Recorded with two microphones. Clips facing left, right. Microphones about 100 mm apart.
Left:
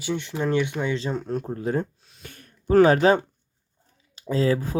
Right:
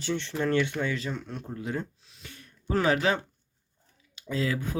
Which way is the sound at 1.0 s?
35° left (ahead or behind).